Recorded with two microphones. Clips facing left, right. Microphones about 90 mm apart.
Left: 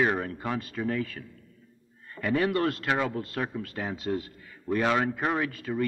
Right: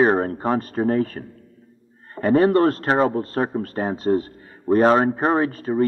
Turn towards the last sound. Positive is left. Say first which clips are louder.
# right 9 dB
turn(degrees=-35)  # may be behind; listen again after turning